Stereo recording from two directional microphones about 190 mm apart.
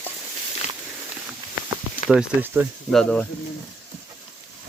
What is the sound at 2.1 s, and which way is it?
Speech, 5° right (ahead or behind).